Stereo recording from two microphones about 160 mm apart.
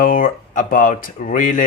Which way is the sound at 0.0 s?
60° left (ahead or behind).